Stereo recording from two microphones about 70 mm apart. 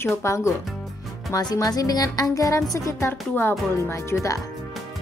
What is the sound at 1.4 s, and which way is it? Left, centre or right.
A woman's voice, left.